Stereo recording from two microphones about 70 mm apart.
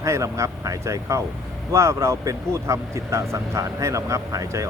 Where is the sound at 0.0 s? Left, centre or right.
Right.